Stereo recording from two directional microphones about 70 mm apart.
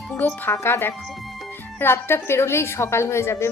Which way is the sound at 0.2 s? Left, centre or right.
Left.